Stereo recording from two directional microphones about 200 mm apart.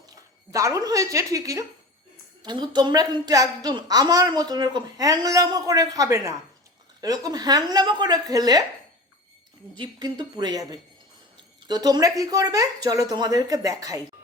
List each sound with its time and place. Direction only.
0.5 s a woman's voice: 15° right (ahead or behind)
9.7 s a woman's voice: 20° right (ahead or behind)